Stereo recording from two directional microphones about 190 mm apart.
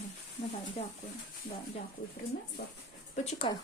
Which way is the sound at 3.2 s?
30° left (ahead or behind).